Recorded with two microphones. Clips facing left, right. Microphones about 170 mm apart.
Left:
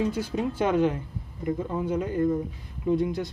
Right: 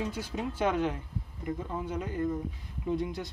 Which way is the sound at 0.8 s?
65° left (ahead or behind).